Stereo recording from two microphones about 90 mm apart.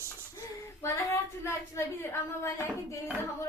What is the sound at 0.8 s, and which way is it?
A woman's voice, 30° left (ahead or behind).